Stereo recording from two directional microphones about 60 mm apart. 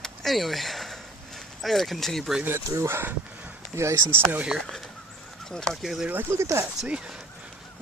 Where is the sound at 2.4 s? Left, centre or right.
Right.